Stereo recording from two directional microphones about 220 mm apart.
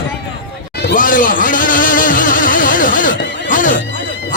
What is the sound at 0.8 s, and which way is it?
Speech, 40° left (ahead or behind).